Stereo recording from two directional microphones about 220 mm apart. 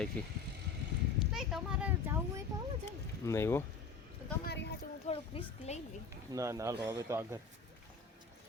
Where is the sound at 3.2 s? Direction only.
10° left (ahead or behind).